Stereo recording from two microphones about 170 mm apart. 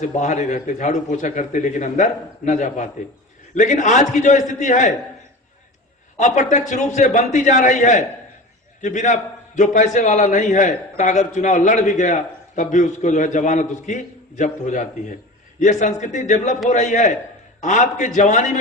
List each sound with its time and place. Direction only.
0.0 s a man's voice: 45° left (ahead or behind)
6.1 s a man's voice: 45° left (ahead or behind)